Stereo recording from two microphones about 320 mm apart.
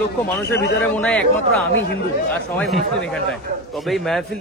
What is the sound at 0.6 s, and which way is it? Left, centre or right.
Speech, left.